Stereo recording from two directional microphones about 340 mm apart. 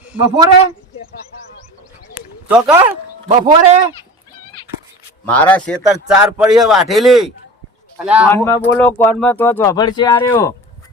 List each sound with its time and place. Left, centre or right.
0.1 s a man's voice: centre
2.5 s speech: centre
3.2 s a man's voice: centre
5.2 s speech: centre
8.3 s speech: centre